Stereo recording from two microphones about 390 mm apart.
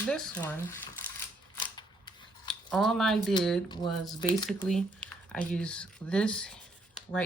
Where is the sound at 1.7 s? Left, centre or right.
Centre.